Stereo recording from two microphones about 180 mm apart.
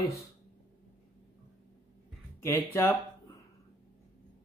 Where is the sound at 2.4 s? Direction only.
15° left (ahead or behind).